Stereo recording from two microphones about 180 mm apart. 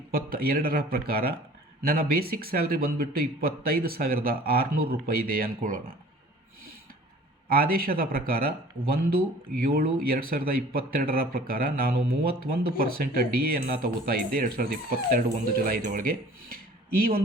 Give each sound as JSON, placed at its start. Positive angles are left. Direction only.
{"t": 0.1, "sound": "speech", "side_deg": -55}
{"t": 7.5, "sound": "speech", "side_deg": -55}